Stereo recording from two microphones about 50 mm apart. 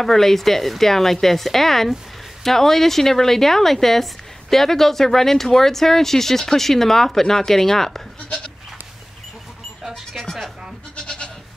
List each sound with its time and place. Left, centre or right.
0.0 s a woman's voice: centre
11.0 s goat: centre